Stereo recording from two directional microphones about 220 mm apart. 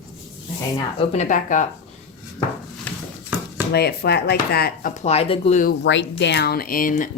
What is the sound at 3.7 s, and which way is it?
Speech, 45° left (ahead or behind).